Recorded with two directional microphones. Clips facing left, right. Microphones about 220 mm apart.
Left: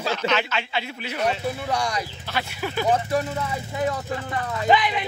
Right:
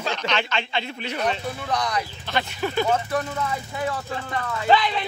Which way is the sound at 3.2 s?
25° left (ahead or behind).